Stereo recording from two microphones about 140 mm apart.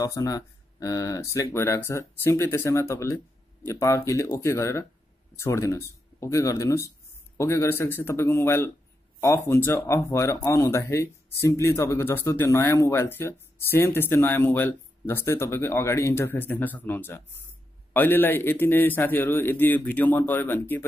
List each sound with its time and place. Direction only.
0.0 s speech: 25° left (ahead or behind)